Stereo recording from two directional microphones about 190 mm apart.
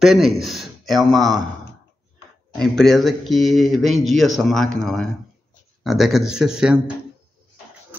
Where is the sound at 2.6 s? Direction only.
Centre (ahead or behind).